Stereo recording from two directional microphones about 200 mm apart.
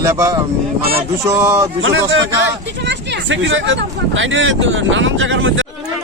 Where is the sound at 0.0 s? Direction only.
15° right (ahead or behind).